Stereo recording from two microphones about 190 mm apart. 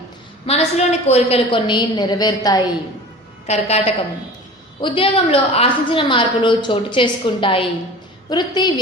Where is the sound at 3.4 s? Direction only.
30° left (ahead or behind).